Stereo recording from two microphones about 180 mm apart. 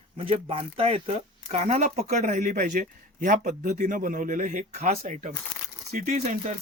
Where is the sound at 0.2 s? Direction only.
30° right (ahead or behind).